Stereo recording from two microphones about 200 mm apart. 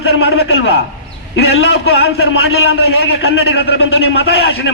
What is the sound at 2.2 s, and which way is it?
Speech, 90° left.